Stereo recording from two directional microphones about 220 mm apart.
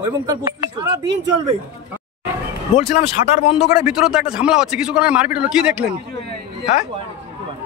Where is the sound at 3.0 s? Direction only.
30° left (ahead or behind).